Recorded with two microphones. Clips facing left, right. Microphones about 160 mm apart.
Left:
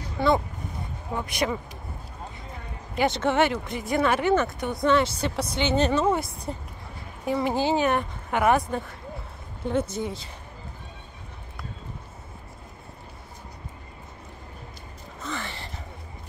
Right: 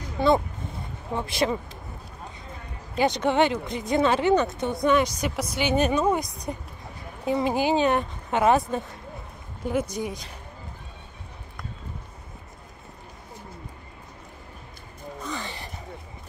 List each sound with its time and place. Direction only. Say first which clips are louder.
1.1 s speech: right 2 dB; 25° right (ahead or behind)
3.0 s a woman's voice: right 1 dB; 15° right (ahead or behind)
15.2 s gasp: left 1 dB; 15° right (ahead or behind)